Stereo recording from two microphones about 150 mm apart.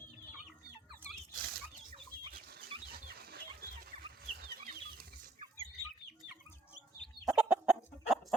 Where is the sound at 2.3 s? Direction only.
90° right.